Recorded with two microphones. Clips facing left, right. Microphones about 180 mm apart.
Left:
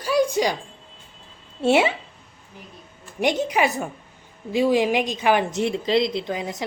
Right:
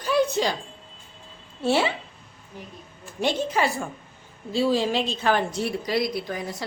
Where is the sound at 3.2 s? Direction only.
15° left (ahead or behind).